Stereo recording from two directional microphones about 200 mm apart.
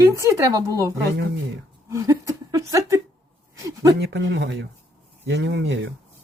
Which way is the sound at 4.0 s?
55° right (ahead or behind).